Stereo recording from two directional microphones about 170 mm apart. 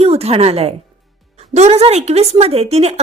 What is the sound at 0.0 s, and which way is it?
A woman's voice, 35° right (ahead or behind).